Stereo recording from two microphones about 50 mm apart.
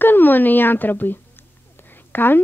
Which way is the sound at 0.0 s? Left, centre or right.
Left.